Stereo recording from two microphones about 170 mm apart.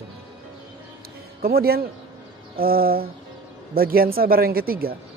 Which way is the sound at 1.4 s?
65° right (ahead or behind).